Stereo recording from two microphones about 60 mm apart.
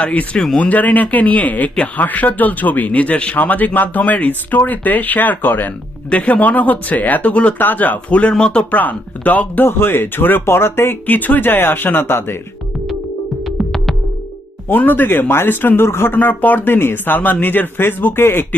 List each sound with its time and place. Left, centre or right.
0.0 s speech: left
6.1 s speech: left
8.7 s speech: left
9.6 s speech: left
11.0 s speech: left
13.4 s music: centre
14.7 s speech: left